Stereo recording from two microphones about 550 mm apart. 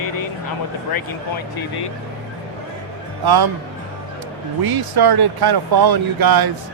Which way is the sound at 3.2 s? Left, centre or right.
Right.